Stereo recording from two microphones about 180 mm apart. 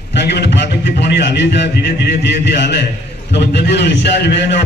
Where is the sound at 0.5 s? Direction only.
70° left (ahead or behind).